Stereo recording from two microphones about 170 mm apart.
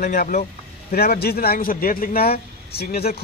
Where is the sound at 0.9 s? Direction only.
65° left (ahead or behind).